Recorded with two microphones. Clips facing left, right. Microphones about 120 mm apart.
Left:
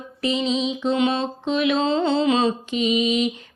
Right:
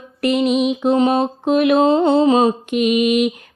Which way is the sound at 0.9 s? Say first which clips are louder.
Right 5 dB; 45° right (ahead or behind).